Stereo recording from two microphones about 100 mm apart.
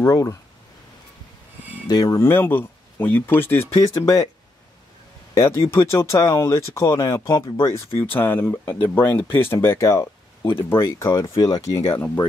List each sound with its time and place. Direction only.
0.0 s speech: 35° left (ahead or behind)
1.9 s speech: 35° left (ahead or behind)
2.2 s speech: 20° left (ahead or behind)
3.9 s speech: 40° left (ahead or behind)
5.3 s speech: 30° left (ahead or behind)
7.2 s speech: 50° left (ahead or behind)
7.6 s speech: 25° left (ahead or behind)
11.9 s speech: 20° left (ahead or behind)